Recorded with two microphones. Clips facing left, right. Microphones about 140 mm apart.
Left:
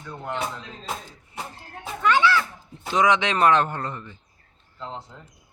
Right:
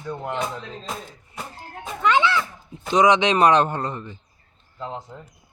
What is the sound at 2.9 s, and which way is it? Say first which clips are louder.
A man's voice: right 4 dB; 20° right (ahead or behind).